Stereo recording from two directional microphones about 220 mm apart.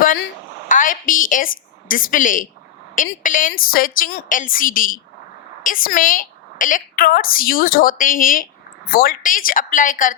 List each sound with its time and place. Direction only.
0.7 s a woman's voice: 35° left (ahead or behind)